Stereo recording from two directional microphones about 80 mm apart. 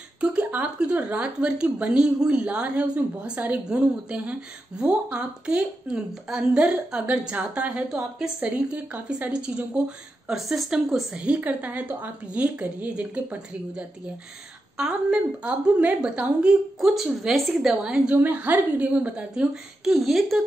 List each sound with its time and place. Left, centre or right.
0.2 s a sound: centre
0.5 s a woman's voice: centre
19.8 s speech: centre